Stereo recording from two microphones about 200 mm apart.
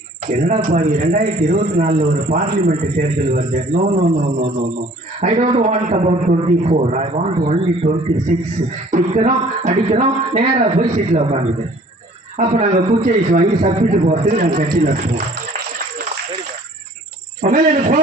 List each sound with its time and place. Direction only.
0.3 s a man's voice: 40° right (ahead or behind)
12.7 s a man's voice: 30° right (ahead or behind)
17.4 s speech: 40° right (ahead or behind)